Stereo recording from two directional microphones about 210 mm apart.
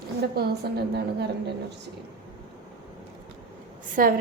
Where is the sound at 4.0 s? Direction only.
40° right (ahead or behind).